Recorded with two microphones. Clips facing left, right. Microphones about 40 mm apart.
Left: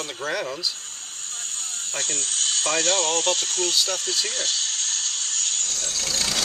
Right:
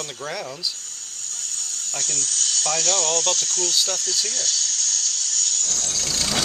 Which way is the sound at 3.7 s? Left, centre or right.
Left.